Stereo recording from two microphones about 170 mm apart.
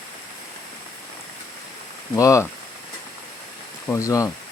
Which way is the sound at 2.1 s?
20° left (ahead or behind).